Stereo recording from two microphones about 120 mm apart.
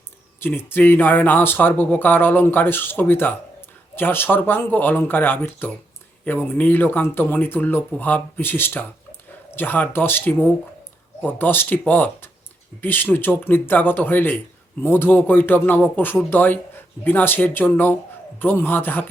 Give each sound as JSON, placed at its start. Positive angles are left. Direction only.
{"t": 0.3, "sound": "speech", "side_deg": 20}